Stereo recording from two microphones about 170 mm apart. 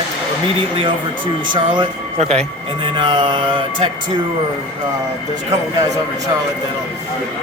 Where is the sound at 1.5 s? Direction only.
30° right (ahead or behind).